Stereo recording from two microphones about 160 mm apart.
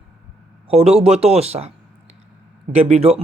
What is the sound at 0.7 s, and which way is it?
Speech, 40° right (ahead or behind).